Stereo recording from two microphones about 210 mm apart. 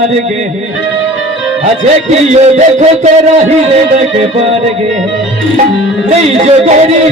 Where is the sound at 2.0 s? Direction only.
35° right (ahead or behind).